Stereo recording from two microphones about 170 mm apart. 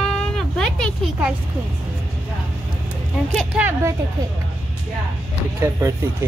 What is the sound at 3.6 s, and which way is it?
Speech, 15° right (ahead or behind).